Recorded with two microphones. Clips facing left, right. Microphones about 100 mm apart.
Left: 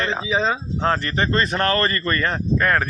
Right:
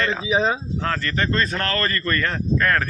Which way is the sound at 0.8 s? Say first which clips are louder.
Left 4 dB; 25° left (ahead or behind).